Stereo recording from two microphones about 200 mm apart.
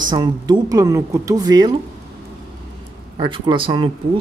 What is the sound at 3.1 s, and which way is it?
Speech, 25° right (ahead or behind).